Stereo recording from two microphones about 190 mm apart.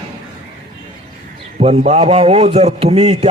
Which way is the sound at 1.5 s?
40° right (ahead or behind).